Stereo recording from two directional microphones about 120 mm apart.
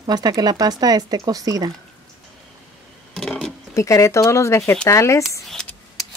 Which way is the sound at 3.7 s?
25° left (ahead or behind).